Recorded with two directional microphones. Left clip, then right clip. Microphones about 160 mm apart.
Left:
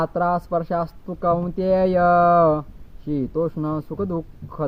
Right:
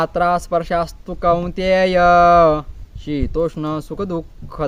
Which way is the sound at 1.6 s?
45° right (ahead or behind).